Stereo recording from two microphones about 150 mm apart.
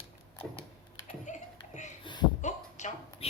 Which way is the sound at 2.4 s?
55° left (ahead or behind).